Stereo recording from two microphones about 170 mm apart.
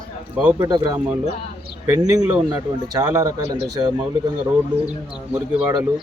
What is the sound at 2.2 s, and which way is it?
Speech, 5° right (ahead or behind).